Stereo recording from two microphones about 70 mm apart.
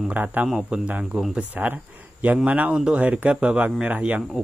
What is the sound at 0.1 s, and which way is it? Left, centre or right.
Speech, right.